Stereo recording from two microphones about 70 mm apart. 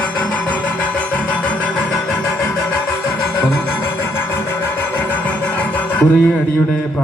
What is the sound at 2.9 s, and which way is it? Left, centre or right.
Music, left.